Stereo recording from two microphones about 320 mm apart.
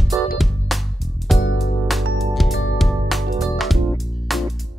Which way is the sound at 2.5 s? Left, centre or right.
Left.